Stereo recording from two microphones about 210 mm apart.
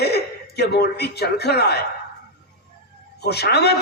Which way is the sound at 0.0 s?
50° left (ahead or behind).